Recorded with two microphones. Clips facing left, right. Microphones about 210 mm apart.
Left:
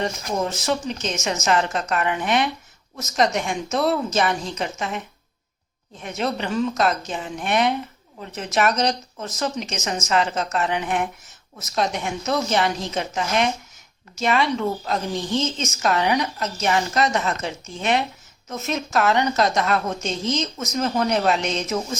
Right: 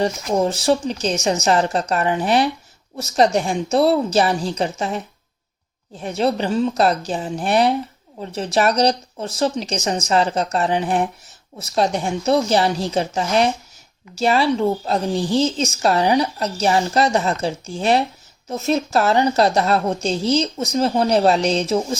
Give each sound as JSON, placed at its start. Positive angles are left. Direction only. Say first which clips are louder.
{"t": 0.0, "sound": "a woman's voice", "louder": "right 6 dB", "side_deg": -35}